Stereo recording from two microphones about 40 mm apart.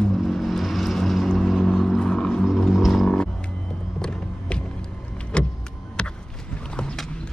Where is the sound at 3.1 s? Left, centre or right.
Left.